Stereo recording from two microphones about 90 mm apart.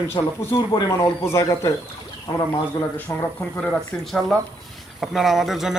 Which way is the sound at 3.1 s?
30° left (ahead or behind).